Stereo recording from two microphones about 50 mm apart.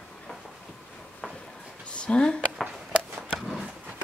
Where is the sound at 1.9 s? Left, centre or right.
Left.